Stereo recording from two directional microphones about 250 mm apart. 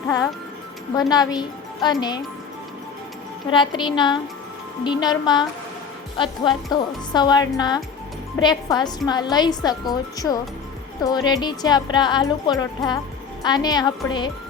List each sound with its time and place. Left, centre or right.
1.1 s a woman's voice: centre
3.5 s music: centre
4.8 s a woman's voice: centre
6.1 s music: centre
6.7 s a woman's voice: centre